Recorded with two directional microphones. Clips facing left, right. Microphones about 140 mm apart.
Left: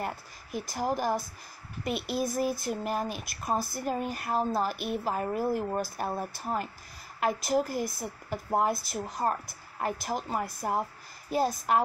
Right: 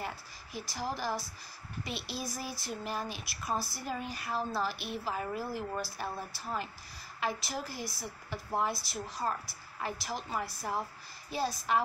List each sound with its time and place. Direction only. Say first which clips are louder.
0.0 s speech: left 5 dB; 50° left (ahead or behind)